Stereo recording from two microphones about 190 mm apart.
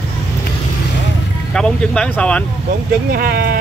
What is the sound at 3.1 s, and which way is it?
Speech, 50° right (ahead or behind).